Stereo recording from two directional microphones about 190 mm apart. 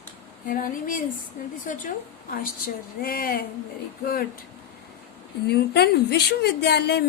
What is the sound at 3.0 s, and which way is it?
Speech, 50° left (ahead or behind).